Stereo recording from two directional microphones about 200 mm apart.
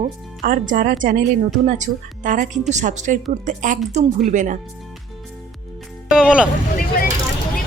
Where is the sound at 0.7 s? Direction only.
45° right (ahead or behind).